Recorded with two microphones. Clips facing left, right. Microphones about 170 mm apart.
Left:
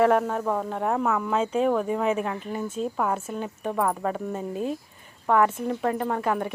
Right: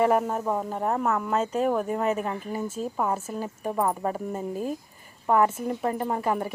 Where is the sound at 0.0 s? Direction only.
5° right (ahead or behind).